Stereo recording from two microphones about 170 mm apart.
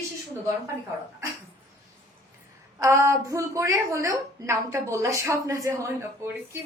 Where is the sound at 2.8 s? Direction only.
15° right (ahead or behind).